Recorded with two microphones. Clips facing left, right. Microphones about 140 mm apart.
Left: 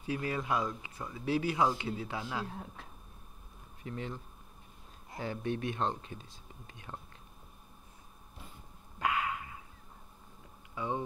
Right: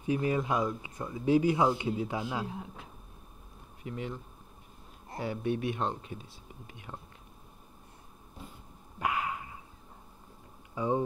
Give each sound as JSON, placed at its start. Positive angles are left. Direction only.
{"t": 0.0, "sound": "a man's voice", "side_deg": -20}
{"t": 5.2, "sound": "a man's voice", "side_deg": -10}
{"t": 9.0, "sound": "a sound", "side_deg": -20}
{"t": 10.7, "sound": "speech", "side_deg": -25}